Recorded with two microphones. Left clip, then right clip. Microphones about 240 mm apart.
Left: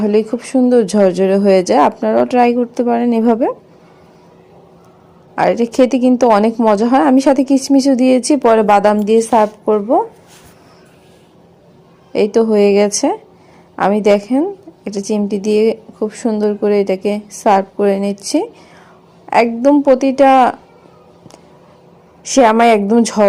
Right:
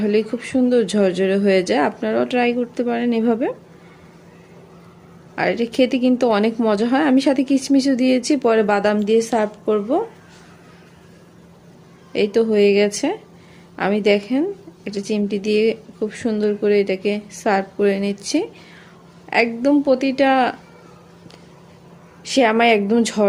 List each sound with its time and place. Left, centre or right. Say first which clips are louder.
0.0 s a woman's voice: left 5 dB; centre
5.3 s a woman's voice: left 7 dB; centre
6.7 s a woman's voice: left 7 dB; centre
9.2 s a woman's voice: left 8 dB; centre
12.1 s a woman's voice: left 5 dB; centre
19.3 s a woman's voice: left 6 dB; centre
19.9 s a woman's voice: left 9 dB; centre
22.4 s a woman's voice: left 6 dB; centre